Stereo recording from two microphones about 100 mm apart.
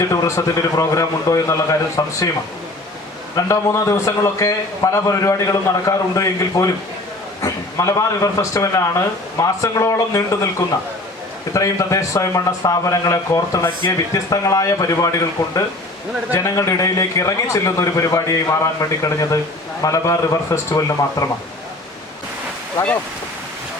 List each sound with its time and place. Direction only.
0.0 s a man's voice: 30° left (ahead or behind)
3.3 s a man's voice: 30° left (ahead or behind)